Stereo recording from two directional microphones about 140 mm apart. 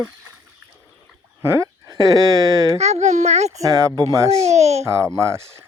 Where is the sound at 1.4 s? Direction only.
20° right (ahead or behind).